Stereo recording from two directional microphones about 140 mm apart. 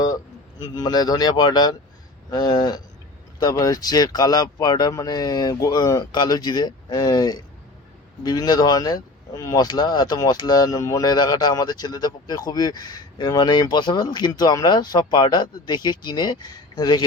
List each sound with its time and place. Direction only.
0.6 s speech: 30° left (ahead or behind)